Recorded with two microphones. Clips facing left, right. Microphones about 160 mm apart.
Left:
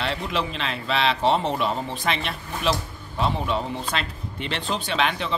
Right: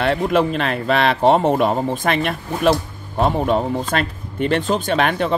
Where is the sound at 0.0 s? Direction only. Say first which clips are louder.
Right 10 dB; 50° right (ahead or behind).